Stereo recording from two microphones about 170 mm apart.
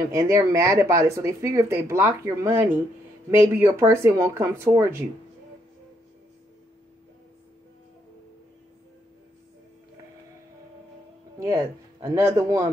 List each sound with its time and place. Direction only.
0.1 s speech: 20° right (ahead or behind)
11.3 s speech: 15° right (ahead or behind)